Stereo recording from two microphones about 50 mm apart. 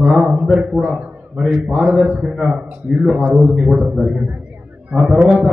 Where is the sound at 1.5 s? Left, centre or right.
Right.